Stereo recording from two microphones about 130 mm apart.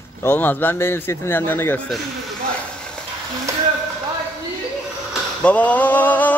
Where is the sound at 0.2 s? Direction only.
15° left (ahead or behind).